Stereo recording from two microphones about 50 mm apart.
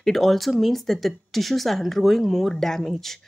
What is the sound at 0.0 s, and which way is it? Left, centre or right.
Speech, centre.